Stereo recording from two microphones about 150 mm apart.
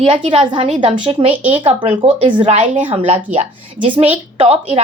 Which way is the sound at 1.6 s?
40° right (ahead or behind).